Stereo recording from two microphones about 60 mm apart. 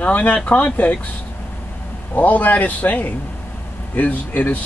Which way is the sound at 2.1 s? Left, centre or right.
Left.